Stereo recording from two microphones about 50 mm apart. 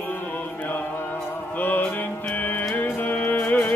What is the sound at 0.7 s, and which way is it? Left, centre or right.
Music, left.